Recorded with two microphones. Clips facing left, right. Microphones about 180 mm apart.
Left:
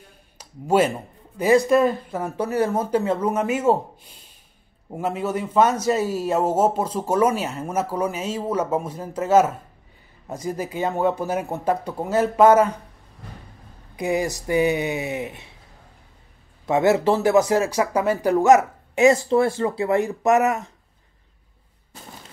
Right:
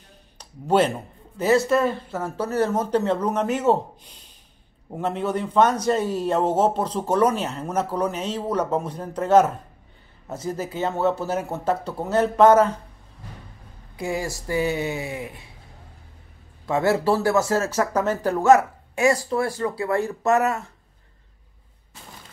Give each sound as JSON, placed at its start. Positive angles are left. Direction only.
{"t": 0.4, "sound": "speech", "side_deg": 10}
{"t": 13.9, "sound": "speech", "side_deg": 20}
{"t": 16.6, "sound": "speech", "side_deg": 20}